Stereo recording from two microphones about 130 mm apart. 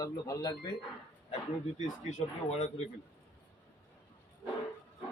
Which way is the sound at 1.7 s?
60° left (ahead or behind).